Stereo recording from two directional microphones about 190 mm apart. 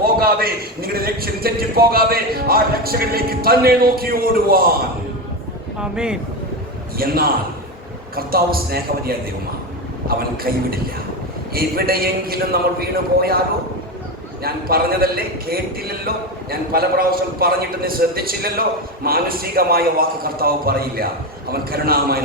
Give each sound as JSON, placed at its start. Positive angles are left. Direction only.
{"t": 0.0, "sound": "a man's voice", "side_deg": -50}
{"t": 5.8, "sound": "speech", "side_deg": -5}
{"t": 6.9, "sound": "a man's voice", "side_deg": -50}
{"t": 14.4, "sound": "a man's voice", "side_deg": -50}